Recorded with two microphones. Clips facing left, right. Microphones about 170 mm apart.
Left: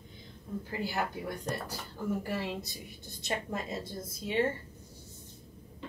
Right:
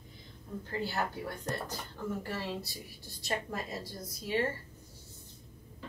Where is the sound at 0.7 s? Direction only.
15° left (ahead or behind).